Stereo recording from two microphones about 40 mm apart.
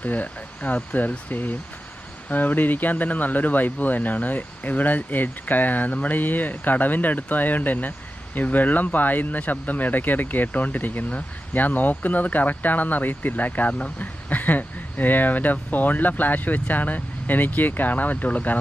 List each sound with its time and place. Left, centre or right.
0.0 s speech: left